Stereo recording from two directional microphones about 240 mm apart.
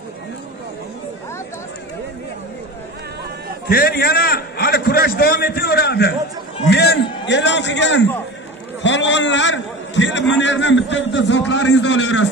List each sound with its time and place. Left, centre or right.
3.6 s a man's voice: left